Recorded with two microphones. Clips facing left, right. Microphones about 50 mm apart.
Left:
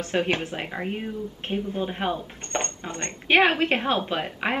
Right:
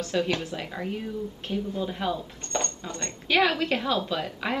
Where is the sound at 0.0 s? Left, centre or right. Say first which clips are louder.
Left 2 dB; left.